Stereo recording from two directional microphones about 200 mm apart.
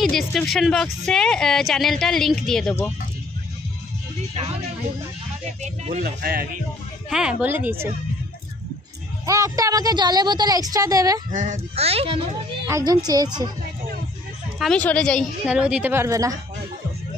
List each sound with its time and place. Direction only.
0.0 s a woman's voice: centre (ahead or behind)
5.6 s a child's voice: 35° right (ahead or behind)
6.0 s a man's voice: 50° right (ahead or behind)
7.1 s a woman's voice: 5° right (ahead or behind)
9.2 s a woman's voice: 15° right (ahead or behind)
11.3 s a child's voice: 35° right (ahead or behind)
12.6 s a woman's voice: 15° right (ahead or behind)
14.6 s a woman's voice: 5° left (ahead or behind); by 16.3 s 15° right (ahead or behind)